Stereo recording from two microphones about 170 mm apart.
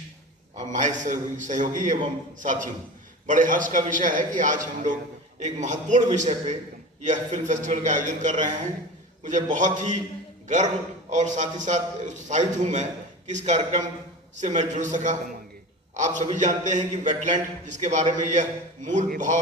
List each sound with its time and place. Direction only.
0.5 s a man's voice: 45° right (ahead or behind)